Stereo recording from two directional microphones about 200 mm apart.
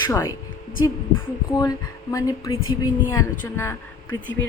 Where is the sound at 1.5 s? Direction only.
15° left (ahead or behind).